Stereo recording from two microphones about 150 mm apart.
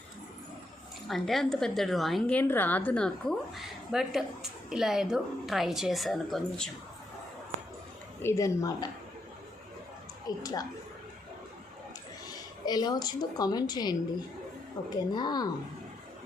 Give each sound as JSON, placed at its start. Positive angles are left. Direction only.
{"t": 1.0, "sound": "a woman's voice", "side_deg": 0}
{"t": 8.2, "sound": "a woman's voice", "side_deg": 20}
{"t": 10.2, "sound": "a woman's voice", "side_deg": 25}
{"t": 12.6, "sound": "a woman's voice", "side_deg": 25}